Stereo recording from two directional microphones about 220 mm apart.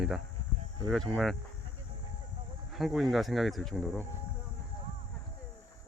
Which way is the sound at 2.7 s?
Centre (ahead or behind).